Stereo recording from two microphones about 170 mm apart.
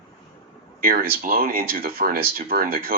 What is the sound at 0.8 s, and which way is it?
Speech, 60° right (ahead or behind).